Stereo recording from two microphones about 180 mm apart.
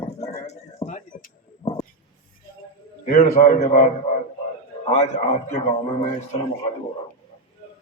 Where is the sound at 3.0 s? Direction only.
50° left (ahead or behind).